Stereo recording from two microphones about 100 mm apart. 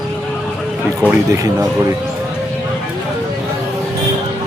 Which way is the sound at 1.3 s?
30° right (ahead or behind).